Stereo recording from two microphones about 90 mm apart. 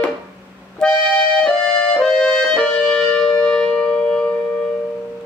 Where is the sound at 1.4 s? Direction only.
10° left (ahead or behind).